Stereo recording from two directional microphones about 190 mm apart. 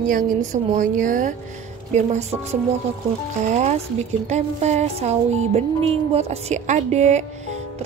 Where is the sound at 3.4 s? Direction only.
40° right (ahead or behind).